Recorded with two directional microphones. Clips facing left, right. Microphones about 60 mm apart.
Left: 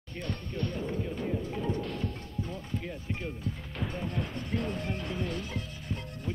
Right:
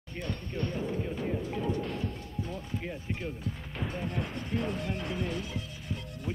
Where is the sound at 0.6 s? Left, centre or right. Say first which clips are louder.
Right 1 dB; right.